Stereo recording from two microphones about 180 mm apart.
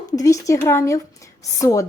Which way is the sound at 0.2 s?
15° left (ahead or behind).